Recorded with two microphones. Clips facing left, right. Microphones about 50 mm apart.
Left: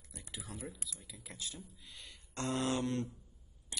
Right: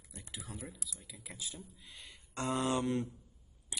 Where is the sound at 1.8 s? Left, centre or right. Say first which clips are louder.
Even; right.